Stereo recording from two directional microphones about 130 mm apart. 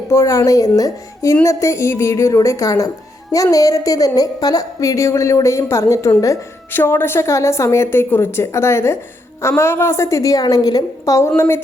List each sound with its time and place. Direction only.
0.1 s a woman's voice: 20° left (ahead or behind)